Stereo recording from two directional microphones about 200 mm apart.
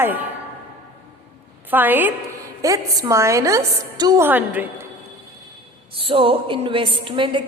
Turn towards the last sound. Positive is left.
turn(degrees=-25)  # may be behind; listen again after turning